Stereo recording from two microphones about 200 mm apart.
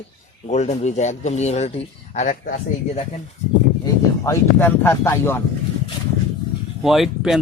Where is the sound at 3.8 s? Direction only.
15° left (ahead or behind).